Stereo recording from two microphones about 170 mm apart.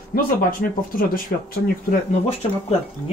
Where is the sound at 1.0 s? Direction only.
60° left (ahead or behind).